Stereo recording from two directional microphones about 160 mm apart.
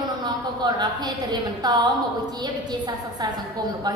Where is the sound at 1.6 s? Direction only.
25° right (ahead or behind).